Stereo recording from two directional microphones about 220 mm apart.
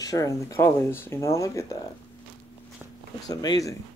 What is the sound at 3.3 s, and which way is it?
Speech, 15° left (ahead or behind).